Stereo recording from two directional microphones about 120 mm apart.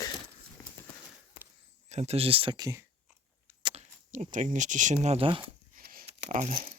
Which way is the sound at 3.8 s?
85° right.